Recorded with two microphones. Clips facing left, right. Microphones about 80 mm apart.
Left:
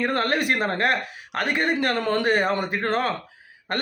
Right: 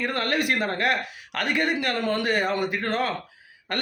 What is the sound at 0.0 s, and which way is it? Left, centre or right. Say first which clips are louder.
Speech: left 2 dB; left.